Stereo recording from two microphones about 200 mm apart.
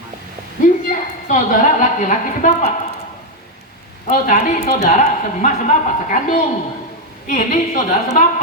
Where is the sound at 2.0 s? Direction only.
40° left (ahead or behind).